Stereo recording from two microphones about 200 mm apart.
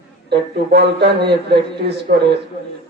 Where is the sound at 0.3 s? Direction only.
55° right (ahead or behind).